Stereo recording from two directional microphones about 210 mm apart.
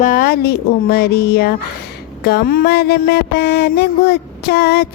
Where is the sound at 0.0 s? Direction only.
45° left (ahead or behind).